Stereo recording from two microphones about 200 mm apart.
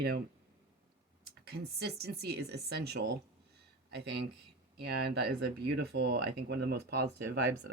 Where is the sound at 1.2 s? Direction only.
50° right (ahead or behind).